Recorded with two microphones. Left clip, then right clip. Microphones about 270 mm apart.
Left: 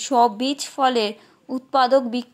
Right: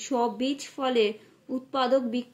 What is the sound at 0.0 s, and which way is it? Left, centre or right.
A woman's voice, centre.